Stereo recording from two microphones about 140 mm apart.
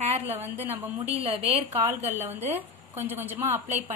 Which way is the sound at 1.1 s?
45° right (ahead or behind).